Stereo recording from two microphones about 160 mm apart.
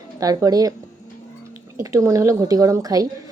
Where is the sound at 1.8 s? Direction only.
20° right (ahead or behind).